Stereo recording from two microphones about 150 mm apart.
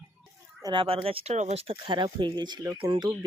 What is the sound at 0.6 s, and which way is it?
Speech, 35° right (ahead or behind).